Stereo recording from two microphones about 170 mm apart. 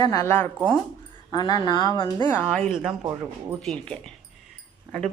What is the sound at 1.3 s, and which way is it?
Speech, 25° left (ahead or behind).